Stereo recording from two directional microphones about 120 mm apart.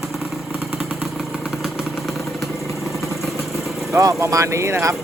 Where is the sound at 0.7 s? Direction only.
5° right (ahead or behind).